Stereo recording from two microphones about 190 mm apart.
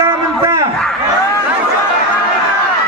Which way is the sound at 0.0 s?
15° right (ahead or behind).